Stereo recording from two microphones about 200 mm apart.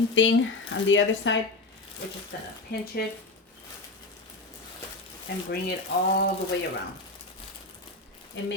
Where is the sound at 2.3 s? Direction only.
55° left (ahead or behind).